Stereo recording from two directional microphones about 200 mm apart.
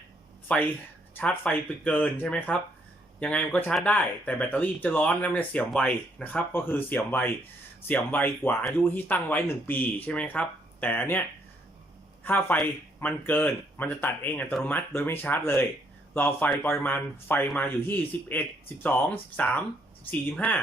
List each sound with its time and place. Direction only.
0.4 s speech: 5° left (ahead or behind)
12.2 s speech: 10° left (ahead or behind)